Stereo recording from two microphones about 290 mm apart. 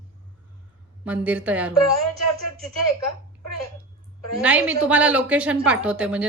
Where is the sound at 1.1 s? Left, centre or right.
Centre.